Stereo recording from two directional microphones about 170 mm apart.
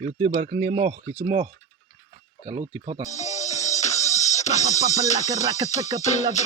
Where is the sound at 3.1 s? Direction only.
40° left (ahead or behind).